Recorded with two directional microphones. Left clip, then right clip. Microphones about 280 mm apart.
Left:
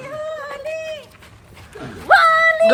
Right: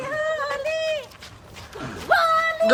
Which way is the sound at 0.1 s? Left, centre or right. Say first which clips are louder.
Right 3 dB; right.